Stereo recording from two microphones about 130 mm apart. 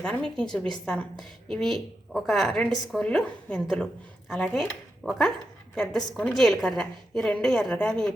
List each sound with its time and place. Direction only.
0.0 s a woman's voice: 5° left (ahead or behind)